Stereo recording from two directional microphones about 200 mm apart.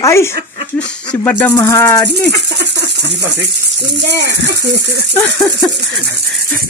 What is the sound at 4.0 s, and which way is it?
Speech, 60° right (ahead or behind).